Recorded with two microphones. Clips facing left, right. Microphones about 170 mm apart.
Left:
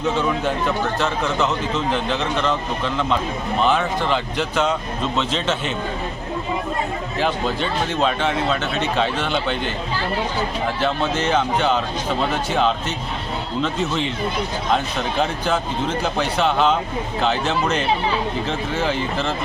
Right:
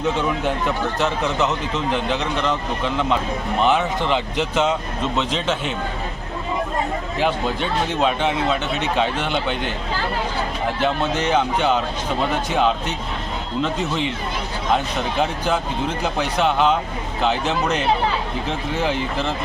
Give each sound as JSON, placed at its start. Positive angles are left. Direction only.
{"t": 0.9, "sound": "speech", "side_deg": -15}
{"t": 7.2, "sound": "speech", "side_deg": -10}
{"t": 10.8, "sound": "speech", "side_deg": -15}
{"t": 13.6, "sound": "speech", "side_deg": -10}
{"t": 15.2, "sound": "speech", "side_deg": -10}